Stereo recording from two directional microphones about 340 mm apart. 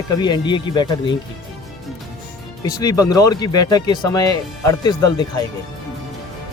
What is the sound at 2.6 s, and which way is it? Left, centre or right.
Speech, centre.